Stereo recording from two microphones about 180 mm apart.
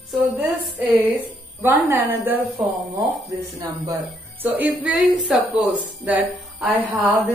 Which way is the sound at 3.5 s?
20° right (ahead or behind).